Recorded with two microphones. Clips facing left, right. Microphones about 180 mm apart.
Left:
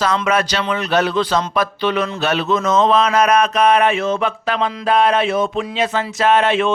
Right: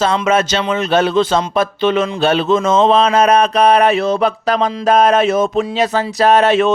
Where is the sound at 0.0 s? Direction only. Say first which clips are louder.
Right 3 dB; 25° right (ahead or behind).